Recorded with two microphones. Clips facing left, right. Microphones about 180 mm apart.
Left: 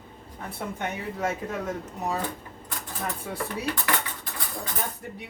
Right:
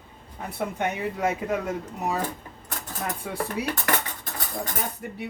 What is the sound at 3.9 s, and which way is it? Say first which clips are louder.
Dishes: right 2 dB; 45° right (ahead or behind).